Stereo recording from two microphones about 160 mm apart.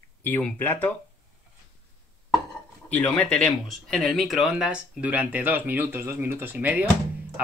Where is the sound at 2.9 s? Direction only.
5° left (ahead or behind).